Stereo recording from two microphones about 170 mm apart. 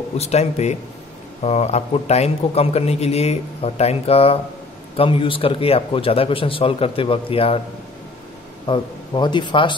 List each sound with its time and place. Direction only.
0.2 s a man's voice: 40° left (ahead or behind)
8.6 s a man's voice: 25° left (ahead or behind)